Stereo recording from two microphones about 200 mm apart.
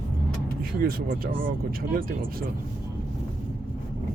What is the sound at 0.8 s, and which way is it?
Speech, 50° right (ahead or behind).